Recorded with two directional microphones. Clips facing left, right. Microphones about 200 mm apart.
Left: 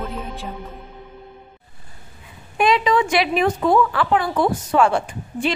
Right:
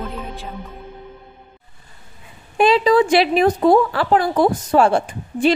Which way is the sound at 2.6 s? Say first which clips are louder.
Right 4 dB; 30° right (ahead or behind).